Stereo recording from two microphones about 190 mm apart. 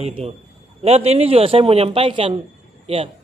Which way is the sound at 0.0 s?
35° right (ahead or behind).